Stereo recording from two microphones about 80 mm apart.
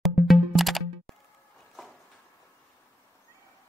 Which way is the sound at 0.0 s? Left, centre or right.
Centre.